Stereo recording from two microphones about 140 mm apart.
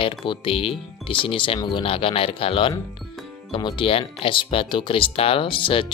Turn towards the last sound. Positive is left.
turn(degrees=40)  # may be behind; listen again after turning